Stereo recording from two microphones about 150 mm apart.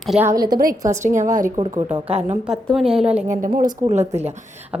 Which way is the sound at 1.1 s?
60° right (ahead or behind).